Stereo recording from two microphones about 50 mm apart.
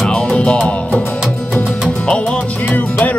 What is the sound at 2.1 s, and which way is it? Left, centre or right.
Music, centre.